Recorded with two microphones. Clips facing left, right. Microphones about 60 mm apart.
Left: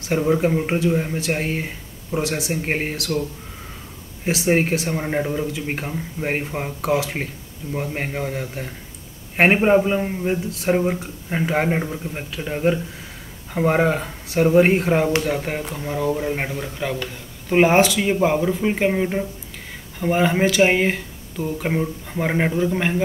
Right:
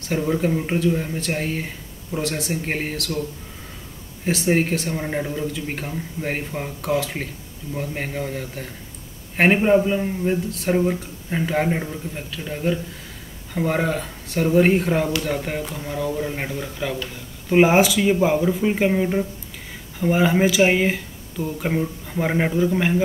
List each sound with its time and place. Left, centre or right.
0.1 s speech: left
2.2 s speech: centre
2.5 s speech: left
4.5 s speech: left
6.8 s speech: centre
7.7 s speech: left
15.2 s speech: centre
16.5 s speech: centre